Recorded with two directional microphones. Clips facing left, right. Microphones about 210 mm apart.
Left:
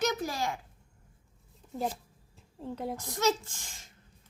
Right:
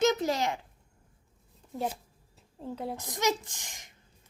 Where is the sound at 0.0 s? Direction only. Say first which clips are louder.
Right 5 dB; 20° right (ahead or behind).